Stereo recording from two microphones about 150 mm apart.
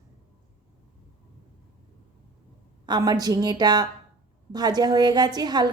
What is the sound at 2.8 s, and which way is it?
A woman's voice, 25° right (ahead or behind).